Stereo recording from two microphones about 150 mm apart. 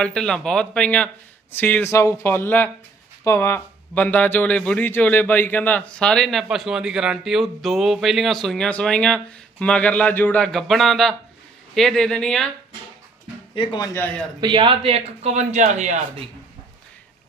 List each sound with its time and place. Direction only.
0.0 s a man's voice: 5° left (ahead or behind)
13.6 s speech: 30° left (ahead or behind)
13.8 s speech: 15° left (ahead or behind)
14.4 s a man's voice: 35° right (ahead or behind); by 16.0 s 50° right (ahead or behind)